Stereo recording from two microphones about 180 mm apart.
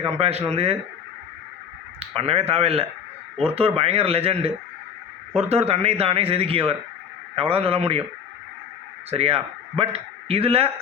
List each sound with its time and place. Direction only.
0.2 s speech: 35° right (ahead or behind)
2.0 s speech: 30° right (ahead or behind)
9.0 s a man's voice: 35° right (ahead or behind)